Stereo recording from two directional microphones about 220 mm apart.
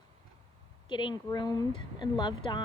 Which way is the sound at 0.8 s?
20° left (ahead or behind).